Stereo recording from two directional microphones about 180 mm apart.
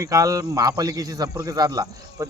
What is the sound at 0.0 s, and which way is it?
Speech, 20° right (ahead or behind).